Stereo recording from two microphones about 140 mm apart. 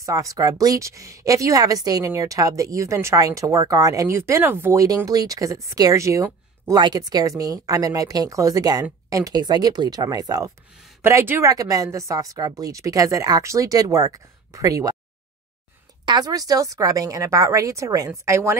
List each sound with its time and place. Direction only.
0.0 s a woman's voice: 25° right (ahead or behind)
16.1 s a woman's voice: 30° right (ahead or behind)